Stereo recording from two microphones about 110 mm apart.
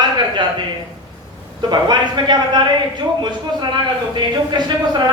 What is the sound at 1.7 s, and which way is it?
Speech, 45° right (ahead or behind).